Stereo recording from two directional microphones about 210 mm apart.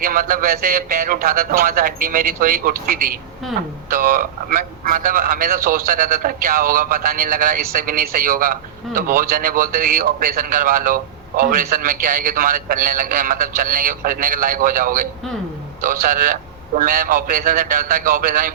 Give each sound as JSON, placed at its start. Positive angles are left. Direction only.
{"t": 0.0, "sound": "a man's voice", "side_deg": -40}